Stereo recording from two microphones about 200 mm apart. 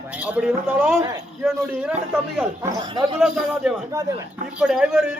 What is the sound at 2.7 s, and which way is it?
Speech, 25° right (ahead or behind).